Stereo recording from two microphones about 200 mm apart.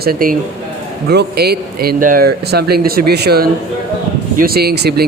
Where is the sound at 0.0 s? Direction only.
45° right (ahead or behind).